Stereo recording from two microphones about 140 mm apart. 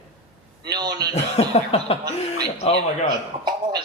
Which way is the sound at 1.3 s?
50° left (ahead or behind).